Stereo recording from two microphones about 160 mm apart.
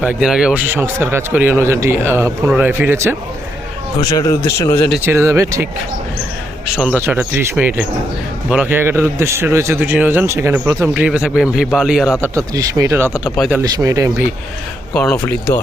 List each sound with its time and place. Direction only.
0.0 s a man's voice: 5° right (ahead or behind)
4.1 s a man's voice: 20° left (ahead or behind)
5.0 s a man's voice: 15° right (ahead or behind)
6.8 s a man's voice: 10° right (ahead or behind)
12.2 s speech: 20° right (ahead or behind)
13.2 s a man's voice: centre (ahead or behind)
13.6 s speech: 20° right (ahead or behind)
14.9 s speech: 10° left (ahead or behind)